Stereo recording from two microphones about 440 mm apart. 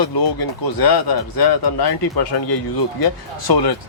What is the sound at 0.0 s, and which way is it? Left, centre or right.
A man's voice, left.